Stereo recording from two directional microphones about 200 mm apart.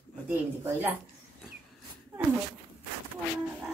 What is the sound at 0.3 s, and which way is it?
Speech, 10° right (ahead or behind).